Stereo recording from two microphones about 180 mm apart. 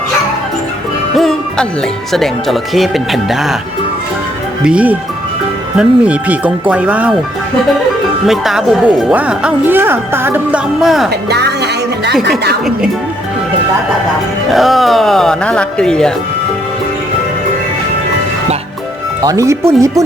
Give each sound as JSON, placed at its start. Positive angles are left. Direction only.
{"t": 1.1, "sound": "music", "side_deg": 0}
{"t": 2.1, "sound": "speech", "side_deg": 0}
{"t": 4.6, "sound": "a woman's voice", "side_deg": -5}
{"t": 8.3, "sound": "a woman's voice", "side_deg": 0}
{"t": 11.1, "sound": "speech", "side_deg": -65}
{"t": 14.5, "sound": "speech", "side_deg": 0}
{"t": 19.2, "sound": "a woman's voice", "side_deg": -20}